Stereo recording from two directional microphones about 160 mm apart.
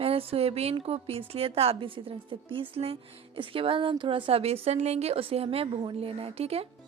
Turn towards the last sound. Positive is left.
turn(degrees=-40)  # may be behind; listen again after turning